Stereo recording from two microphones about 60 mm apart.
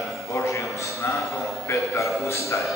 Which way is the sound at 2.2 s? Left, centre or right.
Left.